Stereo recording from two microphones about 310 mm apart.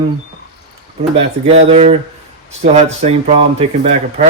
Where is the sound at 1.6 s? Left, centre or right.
Centre.